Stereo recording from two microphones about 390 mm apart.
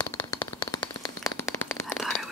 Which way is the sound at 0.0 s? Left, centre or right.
Centre.